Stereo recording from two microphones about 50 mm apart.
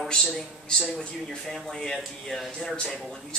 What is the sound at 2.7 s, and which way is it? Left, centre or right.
Speech, centre.